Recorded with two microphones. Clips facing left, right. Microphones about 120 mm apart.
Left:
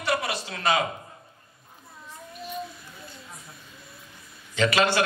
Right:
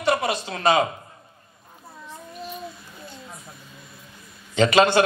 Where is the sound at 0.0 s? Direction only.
25° right (ahead or behind).